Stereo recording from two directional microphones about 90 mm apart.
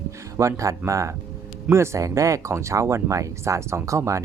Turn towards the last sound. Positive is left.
turn(degrees=-35)  # may be behind; listen again after turning